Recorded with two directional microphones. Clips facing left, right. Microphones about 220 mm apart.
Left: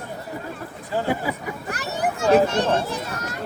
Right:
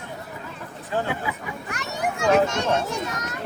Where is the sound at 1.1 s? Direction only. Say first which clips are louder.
Left 4 dB; 35° left (ahead or behind).